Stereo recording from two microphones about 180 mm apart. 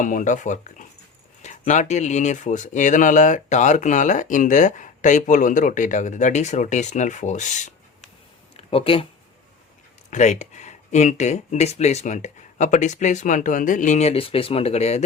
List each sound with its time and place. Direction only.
0.0 s speech: 45° left (ahead or behind)
8.5 s a sound: 30° left (ahead or behind)
10.1 s speech: 40° left (ahead or behind)